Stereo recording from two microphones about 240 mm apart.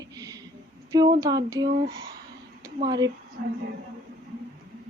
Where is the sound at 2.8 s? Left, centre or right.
Centre.